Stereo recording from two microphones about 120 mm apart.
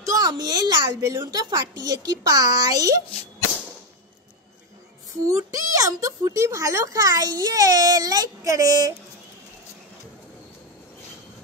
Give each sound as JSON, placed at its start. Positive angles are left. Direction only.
{"t": 0.0, "sound": "a woman's voice", "side_deg": -30}
{"t": 5.2, "sound": "a child's voice", "side_deg": -25}